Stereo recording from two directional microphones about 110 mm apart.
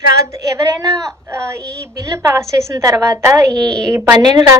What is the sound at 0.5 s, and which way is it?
Speech, 35° right (ahead or behind).